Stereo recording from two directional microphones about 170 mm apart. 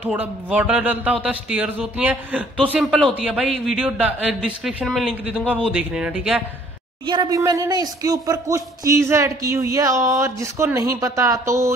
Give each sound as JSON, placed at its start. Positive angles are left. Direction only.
{"t": 0.0, "sound": "a man's voice", "side_deg": -10}
{"t": 7.1, "sound": "speech", "side_deg": -25}